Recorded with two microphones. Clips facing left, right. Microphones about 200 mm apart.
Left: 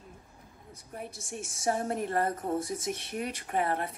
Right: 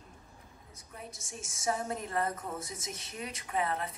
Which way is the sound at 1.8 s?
55° left (ahead or behind).